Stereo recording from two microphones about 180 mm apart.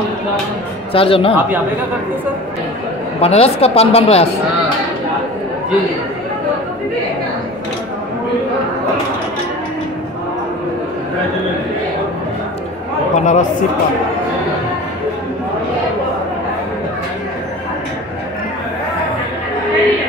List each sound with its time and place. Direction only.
0.9 s speech: 30° left (ahead or behind)
3.2 s speech: 35° left (ahead or behind)
13.1 s speech: 40° left (ahead or behind)